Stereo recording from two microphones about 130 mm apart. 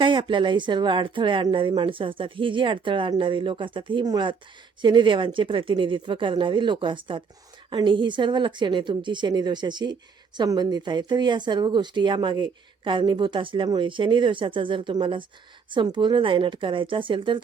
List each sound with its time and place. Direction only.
0.0 s a woman's voice: 40° right (ahead or behind)